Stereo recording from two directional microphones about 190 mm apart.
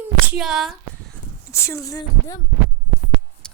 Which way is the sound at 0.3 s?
Centre (ahead or behind).